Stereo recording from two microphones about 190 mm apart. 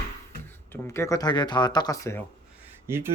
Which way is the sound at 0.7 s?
15° left (ahead or behind).